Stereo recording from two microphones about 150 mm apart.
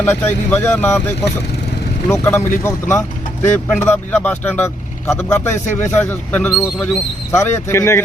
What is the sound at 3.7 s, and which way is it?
A man's voice, 10° left (ahead or behind).